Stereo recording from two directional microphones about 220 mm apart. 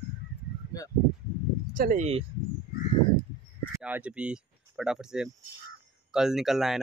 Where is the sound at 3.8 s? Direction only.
5° right (ahead or behind).